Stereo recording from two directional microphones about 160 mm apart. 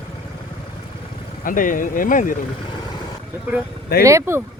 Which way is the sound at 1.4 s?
60° left (ahead or behind).